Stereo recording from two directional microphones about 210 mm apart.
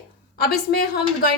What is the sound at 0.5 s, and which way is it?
Speech, 50° left (ahead or behind).